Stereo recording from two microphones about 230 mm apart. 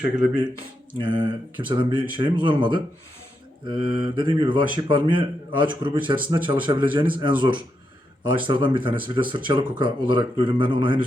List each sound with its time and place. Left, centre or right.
0.0 s speech: left
1.0 s speech: right